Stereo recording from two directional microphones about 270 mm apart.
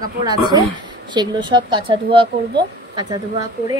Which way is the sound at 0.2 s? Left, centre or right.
Centre.